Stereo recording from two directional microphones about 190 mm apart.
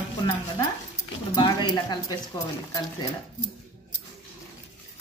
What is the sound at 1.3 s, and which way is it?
Speech, 25° left (ahead or behind).